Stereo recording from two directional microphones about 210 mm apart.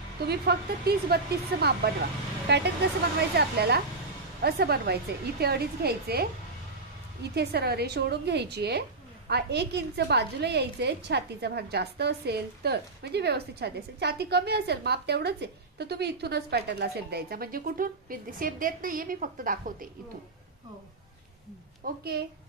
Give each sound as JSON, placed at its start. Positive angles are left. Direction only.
{"t": 0.3, "sound": "a woman's voice", "side_deg": -50}
{"t": 7.3, "sound": "a woman's voice", "side_deg": -50}
{"t": 21.8, "sound": "a woman's voice", "side_deg": -50}